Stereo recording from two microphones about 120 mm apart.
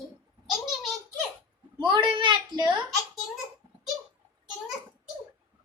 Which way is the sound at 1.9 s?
45° right (ahead or behind).